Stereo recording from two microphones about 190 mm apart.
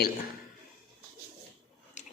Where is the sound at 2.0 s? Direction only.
40° left (ahead or behind).